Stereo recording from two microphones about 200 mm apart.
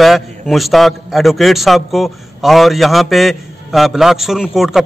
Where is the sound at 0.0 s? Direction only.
Centre (ahead or behind).